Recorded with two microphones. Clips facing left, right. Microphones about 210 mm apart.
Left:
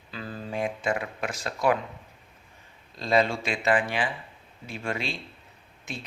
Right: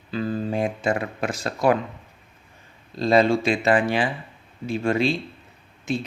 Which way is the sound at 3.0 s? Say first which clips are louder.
Right 6 dB; 35° right (ahead or behind).